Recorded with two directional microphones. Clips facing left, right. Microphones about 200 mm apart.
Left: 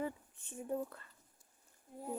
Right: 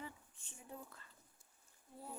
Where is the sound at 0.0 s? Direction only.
55° left (ahead or behind).